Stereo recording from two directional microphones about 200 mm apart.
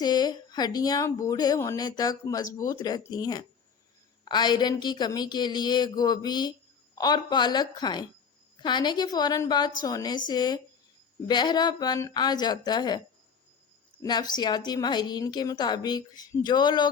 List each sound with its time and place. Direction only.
0.0 s speech: 20° left (ahead or behind)
14.0 s speech: 20° left (ahead or behind)